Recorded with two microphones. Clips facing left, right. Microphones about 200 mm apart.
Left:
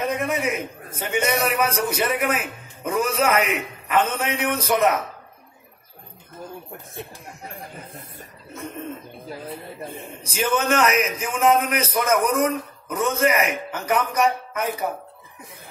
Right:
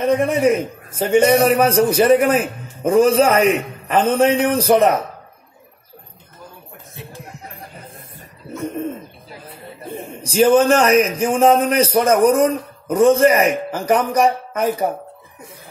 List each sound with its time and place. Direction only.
0.0 s a man's voice: 30° right (ahead or behind)
10.3 s a man's voice: 30° right (ahead or behind)